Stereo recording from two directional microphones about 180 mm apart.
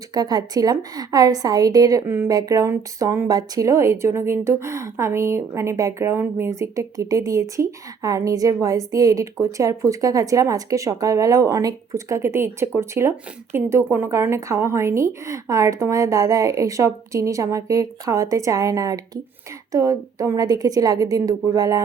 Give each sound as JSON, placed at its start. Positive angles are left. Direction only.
{"t": 0.1, "sound": "a woman's voice", "side_deg": -20}